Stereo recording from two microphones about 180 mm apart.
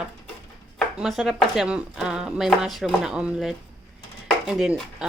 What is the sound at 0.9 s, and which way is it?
Speech, centre (ahead or behind).